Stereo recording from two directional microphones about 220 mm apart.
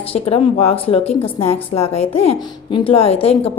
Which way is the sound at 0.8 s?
25° left (ahead or behind).